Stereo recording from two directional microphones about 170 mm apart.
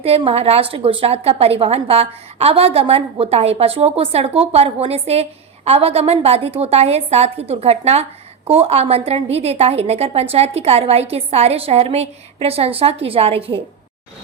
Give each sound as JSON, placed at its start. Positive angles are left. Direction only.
{"t": 0.0, "sound": "a woman's voice", "side_deg": -35}